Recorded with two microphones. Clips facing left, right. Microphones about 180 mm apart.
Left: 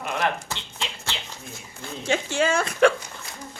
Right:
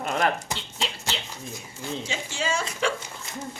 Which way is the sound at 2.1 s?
55° left (ahead or behind).